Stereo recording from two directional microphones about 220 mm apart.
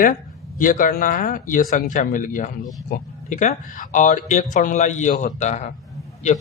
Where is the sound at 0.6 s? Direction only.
40° left (ahead or behind).